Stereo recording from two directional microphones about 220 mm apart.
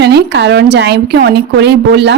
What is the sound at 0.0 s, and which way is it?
A woman's voice, 50° right (ahead or behind).